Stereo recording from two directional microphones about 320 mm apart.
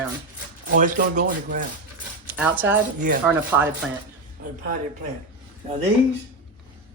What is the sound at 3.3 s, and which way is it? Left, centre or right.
Speech, centre.